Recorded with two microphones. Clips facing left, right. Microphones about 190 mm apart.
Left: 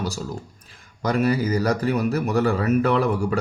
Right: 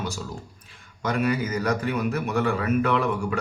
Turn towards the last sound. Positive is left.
turn(degrees=35)  # may be behind; listen again after turning